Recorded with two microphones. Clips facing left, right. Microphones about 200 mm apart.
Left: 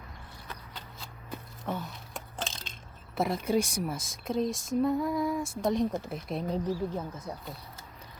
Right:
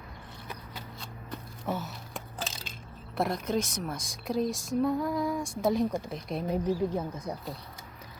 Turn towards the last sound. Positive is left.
turn(degrees=-15)  # may be behind; listen again after turning